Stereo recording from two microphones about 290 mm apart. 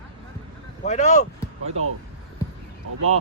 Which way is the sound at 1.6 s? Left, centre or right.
Right.